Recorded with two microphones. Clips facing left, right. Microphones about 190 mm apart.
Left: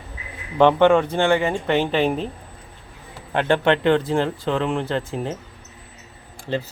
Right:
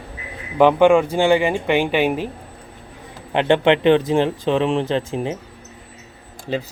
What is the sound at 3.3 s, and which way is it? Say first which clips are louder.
Speech: right 3 dB; 20° right (ahead or behind).